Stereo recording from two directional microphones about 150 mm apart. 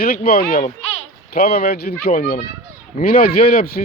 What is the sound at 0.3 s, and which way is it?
Speech, 90° left.